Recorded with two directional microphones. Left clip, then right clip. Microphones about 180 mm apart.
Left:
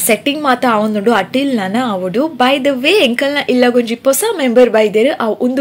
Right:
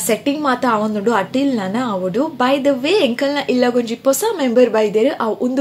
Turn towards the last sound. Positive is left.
turn(degrees=15)  # may be behind; listen again after turning